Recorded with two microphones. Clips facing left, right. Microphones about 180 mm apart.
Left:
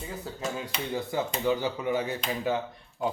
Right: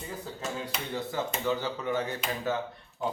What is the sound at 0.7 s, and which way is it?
Speech, centre (ahead or behind).